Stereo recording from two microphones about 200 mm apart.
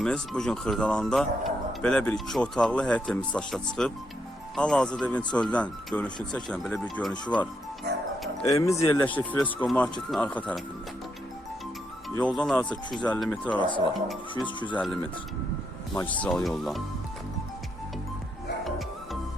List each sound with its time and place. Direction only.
0.0 s speech: 5° left (ahead or behind)
7.9 s music: 55° right (ahead or behind)
8.4 s speech: 15° left (ahead or behind)
12.1 s speech: 5° left (ahead or behind)
13.6 s speech: 25° left (ahead or behind)
13.9 s speech: centre (ahead or behind)
14.4 s speech: 25° left (ahead or behind)
16.0 s speech: 5° left (ahead or behind)